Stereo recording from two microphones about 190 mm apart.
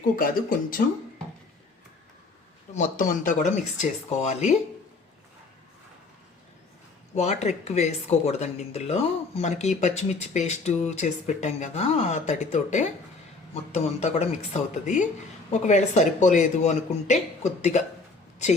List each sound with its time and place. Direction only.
0.2 s speech: 45° left (ahead or behind)
2.7 s speech: 45° left (ahead or behind)
7.2 s speech: 35° left (ahead or behind)